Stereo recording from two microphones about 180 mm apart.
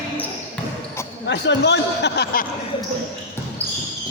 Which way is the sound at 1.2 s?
75° left (ahead or behind).